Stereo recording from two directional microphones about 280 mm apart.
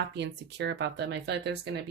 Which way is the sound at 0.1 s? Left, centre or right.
Right.